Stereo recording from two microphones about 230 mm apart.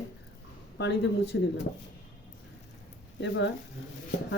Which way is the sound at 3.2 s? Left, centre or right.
Left.